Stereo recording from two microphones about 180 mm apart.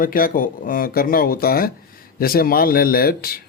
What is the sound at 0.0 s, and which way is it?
Speech, 50° left (ahead or behind).